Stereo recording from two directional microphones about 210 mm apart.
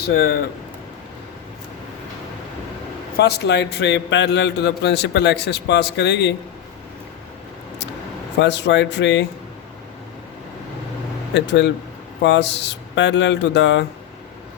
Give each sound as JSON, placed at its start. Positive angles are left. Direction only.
{"t": 0.1, "sound": "a man's voice", "side_deg": 50}
{"t": 3.2, "sound": "a man's voice", "side_deg": 50}
{"t": 8.4, "sound": "speech", "side_deg": 55}
{"t": 11.3, "sound": "speech", "side_deg": 55}